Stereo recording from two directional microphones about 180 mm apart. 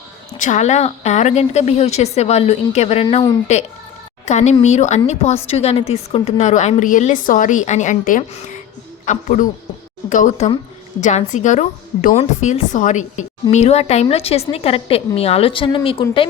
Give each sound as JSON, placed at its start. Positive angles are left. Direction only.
{"t": 0.4, "sound": "a woman's voice", "side_deg": 40}
{"t": 4.3, "sound": "a sound", "side_deg": 40}
{"t": 4.6, "sound": "a woman's voice", "side_deg": 40}